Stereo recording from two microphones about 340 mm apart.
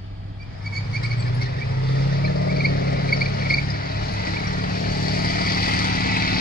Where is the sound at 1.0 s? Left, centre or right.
Left.